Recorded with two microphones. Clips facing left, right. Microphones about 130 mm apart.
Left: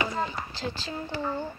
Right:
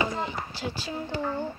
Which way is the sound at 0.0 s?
20° right (ahead or behind).